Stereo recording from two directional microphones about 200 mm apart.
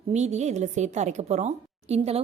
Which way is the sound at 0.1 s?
35° right (ahead or behind).